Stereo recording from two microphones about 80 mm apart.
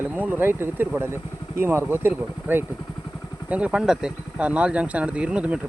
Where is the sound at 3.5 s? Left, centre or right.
Centre.